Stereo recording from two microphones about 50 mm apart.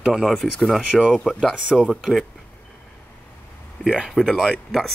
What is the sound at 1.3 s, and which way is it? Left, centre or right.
Speech, centre.